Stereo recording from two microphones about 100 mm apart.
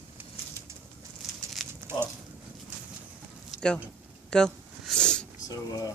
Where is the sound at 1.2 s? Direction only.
5° right (ahead or behind).